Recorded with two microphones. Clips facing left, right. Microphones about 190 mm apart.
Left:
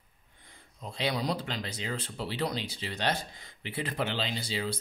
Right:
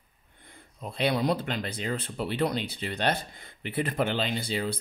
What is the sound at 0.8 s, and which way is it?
Speech, 55° right (ahead or behind).